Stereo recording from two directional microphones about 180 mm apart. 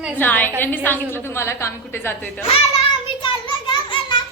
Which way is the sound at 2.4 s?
35° left (ahead or behind).